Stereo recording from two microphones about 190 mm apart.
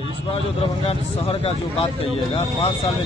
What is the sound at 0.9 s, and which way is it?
Speech, 30° left (ahead or behind).